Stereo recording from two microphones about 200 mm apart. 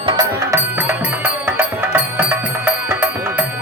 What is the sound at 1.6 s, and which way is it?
Music, 10° right (ahead or behind).